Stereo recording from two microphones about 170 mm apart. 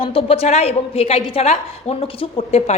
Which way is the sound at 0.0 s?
35° left (ahead or behind).